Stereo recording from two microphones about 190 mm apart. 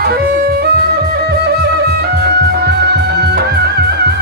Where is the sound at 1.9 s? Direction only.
60° right (ahead or behind).